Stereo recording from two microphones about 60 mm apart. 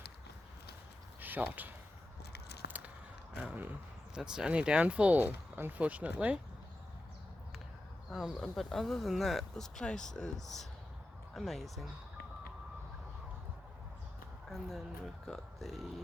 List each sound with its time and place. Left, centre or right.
1.2 s speech: right
2.6 s biting: right
3.3 s speech: right
4.1 s speech: centre
8.1 s speech: centre
14.5 s speech: centre